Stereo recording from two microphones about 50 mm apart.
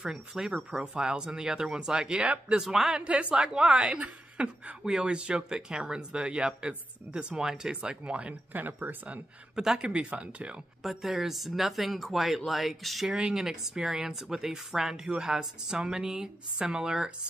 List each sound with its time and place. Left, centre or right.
0.0 s speech: centre
3.0 s speech: right
9.8 s speech: centre
10.8 s speech: centre